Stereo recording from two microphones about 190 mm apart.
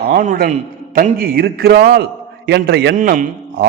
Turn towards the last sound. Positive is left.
turn(degrees=-45)  # may be behind; listen again after turning